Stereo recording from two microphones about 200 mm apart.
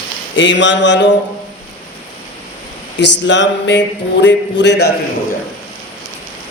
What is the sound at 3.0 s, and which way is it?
A man's voice, 65° left (ahead or behind).